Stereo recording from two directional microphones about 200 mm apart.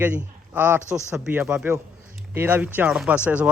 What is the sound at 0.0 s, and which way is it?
A man's voice, 10° right (ahead or behind).